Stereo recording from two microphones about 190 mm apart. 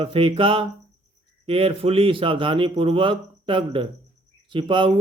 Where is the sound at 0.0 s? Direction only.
30° right (ahead or behind).